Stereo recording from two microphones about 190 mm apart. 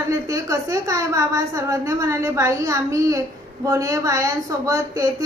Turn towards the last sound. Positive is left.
turn(degrees=-15)  # may be behind; listen again after turning